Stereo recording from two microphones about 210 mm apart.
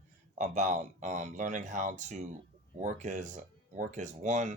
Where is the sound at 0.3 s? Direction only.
35° right (ahead or behind).